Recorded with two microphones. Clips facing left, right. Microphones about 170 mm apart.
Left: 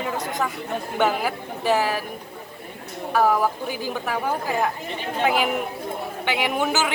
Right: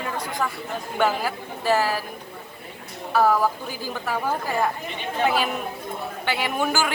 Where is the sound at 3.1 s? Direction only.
15° left (ahead or behind).